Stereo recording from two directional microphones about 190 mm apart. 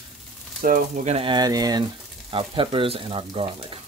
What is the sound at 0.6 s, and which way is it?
Speech, 45° right (ahead or behind).